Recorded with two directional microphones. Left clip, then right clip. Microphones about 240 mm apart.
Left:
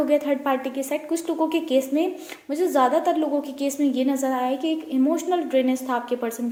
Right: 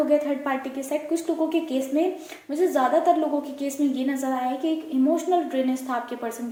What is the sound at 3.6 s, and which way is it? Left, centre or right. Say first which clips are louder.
A woman's voice: left 5 dB; left.